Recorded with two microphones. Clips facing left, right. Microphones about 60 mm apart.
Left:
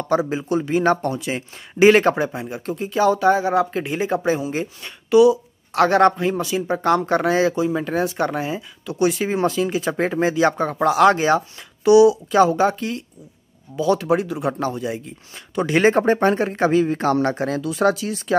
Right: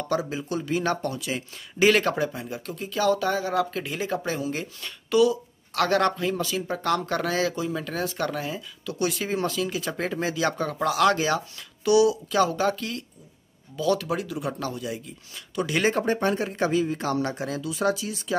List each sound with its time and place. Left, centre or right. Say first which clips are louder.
0.1 s speech: left 8 dB; left